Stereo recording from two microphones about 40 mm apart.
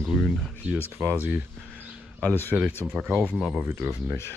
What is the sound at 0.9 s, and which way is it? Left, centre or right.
Speech, right.